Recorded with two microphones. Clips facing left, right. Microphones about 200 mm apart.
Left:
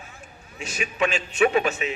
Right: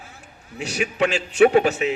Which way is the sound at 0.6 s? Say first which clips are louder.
Right 4 dB; 70° right (ahead or behind).